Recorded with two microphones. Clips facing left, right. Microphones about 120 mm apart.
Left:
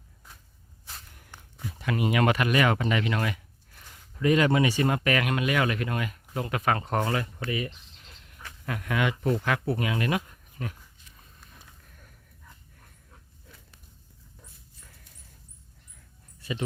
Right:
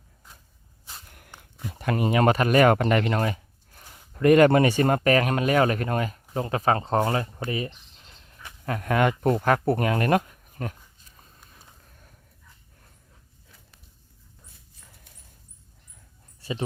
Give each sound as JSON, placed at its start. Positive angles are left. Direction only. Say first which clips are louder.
{"t": 1.8, "sound": "speech", "louder": "right 3 dB", "side_deg": -40}
{"t": 4.2, "sound": "speech", "louder": "right 6 dB", "side_deg": -55}
{"t": 8.6, "sound": "speech", "louder": "right 5 dB", "side_deg": -40}
{"t": 16.4, "sound": "speech", "louder": "right 2 dB", "side_deg": -30}